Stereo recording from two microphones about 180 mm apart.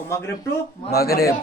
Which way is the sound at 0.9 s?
60° left (ahead or behind).